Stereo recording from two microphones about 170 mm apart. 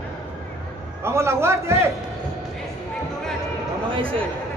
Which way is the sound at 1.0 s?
15° right (ahead or behind).